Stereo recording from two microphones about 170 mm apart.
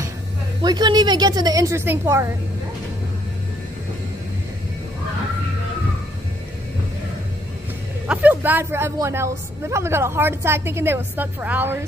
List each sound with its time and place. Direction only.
0.6 s a woman's voice: 25° right (ahead or behind)
8.1 s a woman's voice: 10° right (ahead or behind)